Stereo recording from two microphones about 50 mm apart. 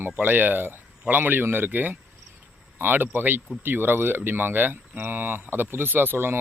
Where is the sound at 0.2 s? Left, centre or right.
Right.